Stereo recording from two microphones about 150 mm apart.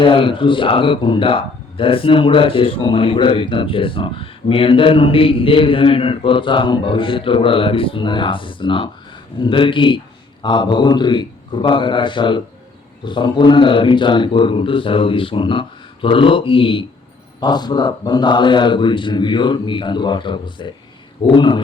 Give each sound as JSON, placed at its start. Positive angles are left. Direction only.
{"t": 0.0, "sound": "speech", "side_deg": 35}